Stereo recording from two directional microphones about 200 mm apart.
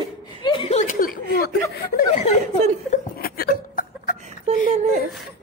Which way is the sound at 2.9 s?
50° left (ahead or behind).